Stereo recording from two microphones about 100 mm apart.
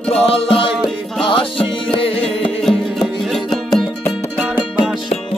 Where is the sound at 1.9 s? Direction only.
75° left (ahead or behind).